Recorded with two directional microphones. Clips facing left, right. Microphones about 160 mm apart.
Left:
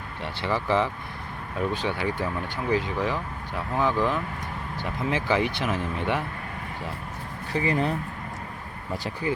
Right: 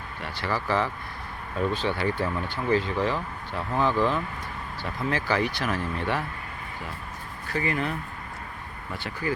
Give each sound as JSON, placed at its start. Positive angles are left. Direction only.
{"t": 0.2, "sound": "speech", "side_deg": 25}
{"t": 7.5, "sound": "speech", "side_deg": 30}